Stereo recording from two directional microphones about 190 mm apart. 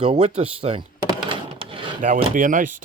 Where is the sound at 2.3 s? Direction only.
45° right (ahead or behind).